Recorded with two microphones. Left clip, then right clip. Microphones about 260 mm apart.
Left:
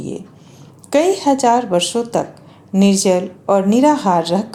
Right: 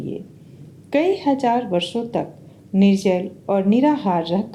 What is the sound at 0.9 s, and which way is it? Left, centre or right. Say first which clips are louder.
Speech: left 5 dB; left.